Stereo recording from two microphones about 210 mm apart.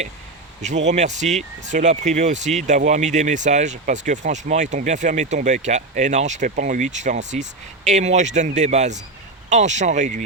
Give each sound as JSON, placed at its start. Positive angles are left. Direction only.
{"t": 0.9, "sound": "speech", "side_deg": -35}